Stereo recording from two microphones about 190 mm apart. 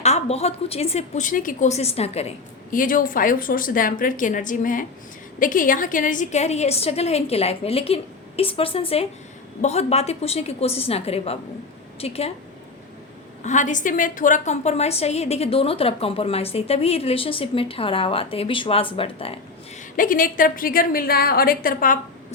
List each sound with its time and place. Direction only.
0.0 s a woman's voice: 35° left (ahead or behind)
2.7 s a woman's voice: 45° left (ahead or behind)
13.4 s a woman's voice: 40° left (ahead or behind)
20.0 s a woman's voice: 45° left (ahead or behind)